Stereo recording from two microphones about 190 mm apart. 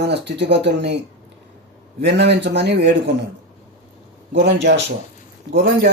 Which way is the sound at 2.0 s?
65° right (ahead or behind).